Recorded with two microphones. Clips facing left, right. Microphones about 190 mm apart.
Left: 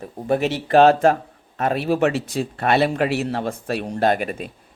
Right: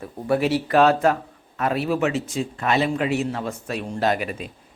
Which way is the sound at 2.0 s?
55° left (ahead or behind).